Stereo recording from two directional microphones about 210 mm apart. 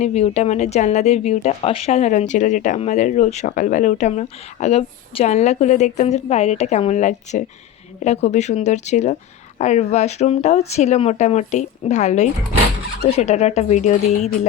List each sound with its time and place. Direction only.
0.0 s a woman's voice: 30° left (ahead or behind)